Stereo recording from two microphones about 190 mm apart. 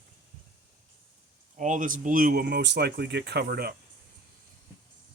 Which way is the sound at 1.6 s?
45° right (ahead or behind).